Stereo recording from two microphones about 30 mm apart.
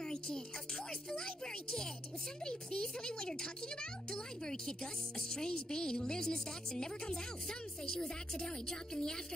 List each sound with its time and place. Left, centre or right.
0.0 s music: left
1.1 s speech: left